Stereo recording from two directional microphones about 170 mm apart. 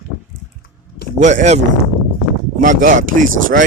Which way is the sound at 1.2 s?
45° right (ahead or behind).